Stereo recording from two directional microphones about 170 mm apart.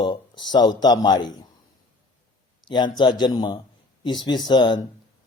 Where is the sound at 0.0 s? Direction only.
25° left (ahead or behind).